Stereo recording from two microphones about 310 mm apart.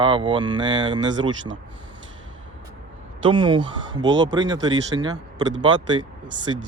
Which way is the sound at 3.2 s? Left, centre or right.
Centre.